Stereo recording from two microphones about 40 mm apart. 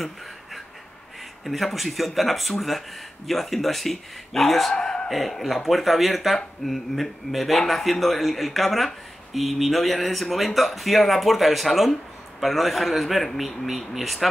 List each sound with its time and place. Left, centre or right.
1.4 s speech: centre
4.7 s a sound: left
5.1 s speech: centre